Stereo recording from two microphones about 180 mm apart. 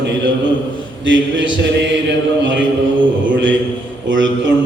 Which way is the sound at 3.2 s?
90° right.